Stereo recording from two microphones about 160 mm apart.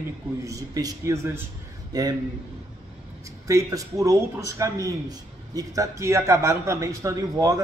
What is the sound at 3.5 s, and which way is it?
A man's voice, 20° right (ahead or behind).